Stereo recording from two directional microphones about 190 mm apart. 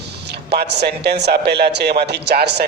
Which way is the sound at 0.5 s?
60° right (ahead or behind).